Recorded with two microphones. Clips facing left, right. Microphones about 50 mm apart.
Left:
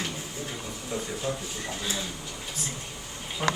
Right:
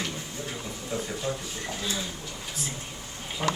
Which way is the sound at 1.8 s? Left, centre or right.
Centre.